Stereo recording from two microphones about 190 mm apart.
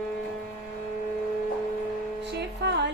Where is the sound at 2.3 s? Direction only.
65° right (ahead or behind).